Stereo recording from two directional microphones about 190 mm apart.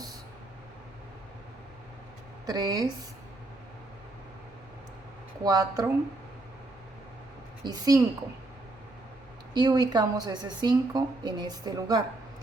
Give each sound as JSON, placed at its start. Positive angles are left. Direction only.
{"t": 2.5, "sound": "a woman's voice", "side_deg": -20}
{"t": 5.4, "sound": "a woman's voice", "side_deg": -20}
{"t": 7.6, "sound": "a woman's voice", "side_deg": -20}
{"t": 9.6, "sound": "a woman's voice", "side_deg": -20}